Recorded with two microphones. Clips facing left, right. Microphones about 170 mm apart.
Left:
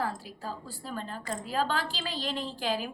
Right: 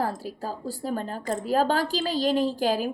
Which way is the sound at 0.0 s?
40° right (ahead or behind).